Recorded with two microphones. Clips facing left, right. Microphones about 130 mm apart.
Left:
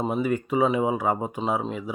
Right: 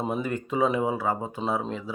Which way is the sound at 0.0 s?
5° left (ahead or behind).